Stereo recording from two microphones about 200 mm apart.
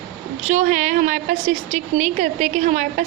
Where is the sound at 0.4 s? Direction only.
40° right (ahead or behind).